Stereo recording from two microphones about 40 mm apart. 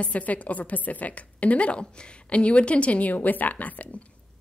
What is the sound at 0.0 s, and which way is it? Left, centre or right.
A woman's voice, left.